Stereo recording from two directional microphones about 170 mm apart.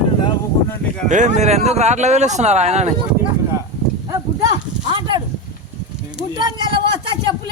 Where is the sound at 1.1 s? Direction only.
45° right (ahead or behind).